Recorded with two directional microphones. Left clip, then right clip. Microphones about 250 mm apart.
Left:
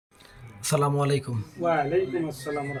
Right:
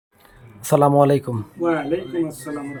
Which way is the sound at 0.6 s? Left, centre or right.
Centre.